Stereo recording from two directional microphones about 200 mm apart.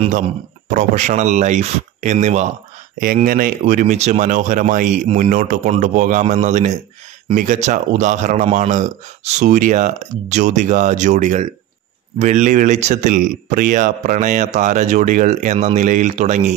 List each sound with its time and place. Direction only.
0.7 s speech: 40° right (ahead or behind)